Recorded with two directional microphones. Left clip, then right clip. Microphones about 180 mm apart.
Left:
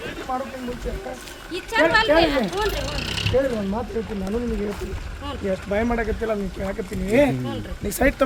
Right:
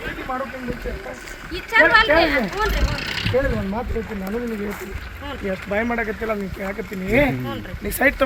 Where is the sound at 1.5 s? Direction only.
35° left (ahead or behind).